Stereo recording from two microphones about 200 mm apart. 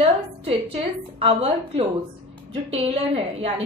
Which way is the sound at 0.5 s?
30° right (ahead or behind).